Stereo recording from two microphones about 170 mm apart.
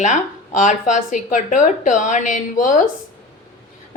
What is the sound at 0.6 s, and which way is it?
A woman's voice, 50° left (ahead or behind).